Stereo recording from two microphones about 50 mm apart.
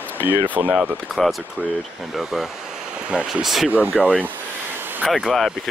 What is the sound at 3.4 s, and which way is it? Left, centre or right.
Speech, centre.